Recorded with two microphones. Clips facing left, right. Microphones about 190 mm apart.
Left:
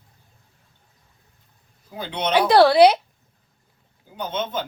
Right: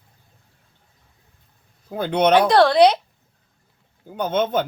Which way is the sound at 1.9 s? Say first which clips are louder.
Right 6 dB; 55° right (ahead or behind).